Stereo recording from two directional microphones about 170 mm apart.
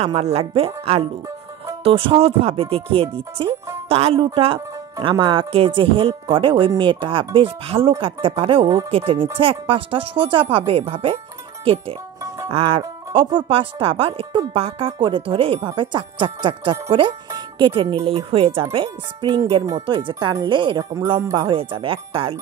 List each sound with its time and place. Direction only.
0.0 s speech: 40° right (ahead or behind)